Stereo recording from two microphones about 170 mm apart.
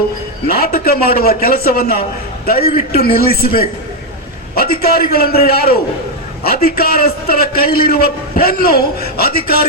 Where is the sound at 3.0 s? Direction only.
65° left (ahead or behind).